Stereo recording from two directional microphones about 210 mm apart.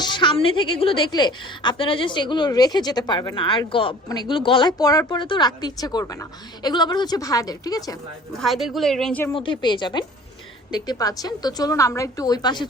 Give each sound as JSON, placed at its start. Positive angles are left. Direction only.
{"t": 0.0, "sound": "a woman's voice", "side_deg": 20}
{"t": 8.4, "sound": "a woman's voice", "side_deg": 0}
{"t": 9.3, "sound": "a woman's voice", "side_deg": 25}